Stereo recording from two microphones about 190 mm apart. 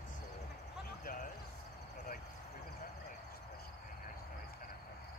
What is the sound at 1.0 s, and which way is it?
Basketball bounce, 45° left (ahead or behind).